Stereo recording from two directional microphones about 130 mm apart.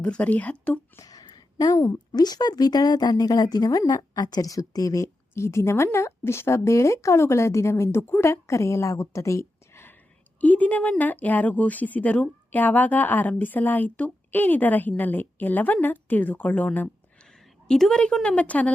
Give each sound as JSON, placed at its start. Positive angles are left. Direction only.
{"t": 0.0, "sound": "speech", "side_deg": 10}
{"t": 0.9, "sound": "a woman's voice", "side_deg": 30}